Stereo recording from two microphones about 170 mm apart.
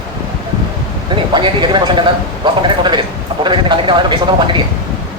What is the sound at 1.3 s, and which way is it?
Speech, 25° right (ahead or behind).